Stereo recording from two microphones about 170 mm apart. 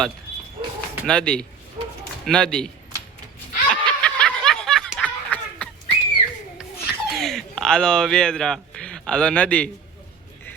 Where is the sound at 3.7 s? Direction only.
5° left (ahead or behind).